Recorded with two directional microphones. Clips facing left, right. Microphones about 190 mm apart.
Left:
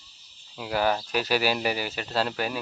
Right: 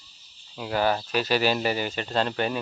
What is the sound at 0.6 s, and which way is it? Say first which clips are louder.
Speech: right 1 dB; 5° left (ahead or behind).